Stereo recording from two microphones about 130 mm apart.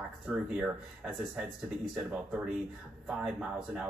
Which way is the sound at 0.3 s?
10° right (ahead or behind).